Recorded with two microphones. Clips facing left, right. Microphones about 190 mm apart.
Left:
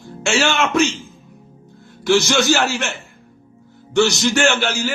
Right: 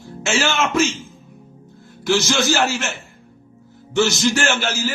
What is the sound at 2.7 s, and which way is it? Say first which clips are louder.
Speech: left 1 dB; 60° left (ahead or behind).